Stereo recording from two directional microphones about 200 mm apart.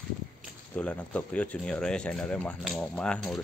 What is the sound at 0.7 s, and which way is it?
Speech, 5° left (ahead or behind).